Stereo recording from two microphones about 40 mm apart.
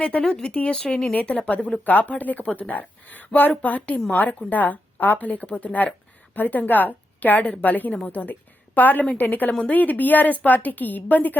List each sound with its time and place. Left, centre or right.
0.0 s a woman's voice: left
1.1 s a woman's voice: left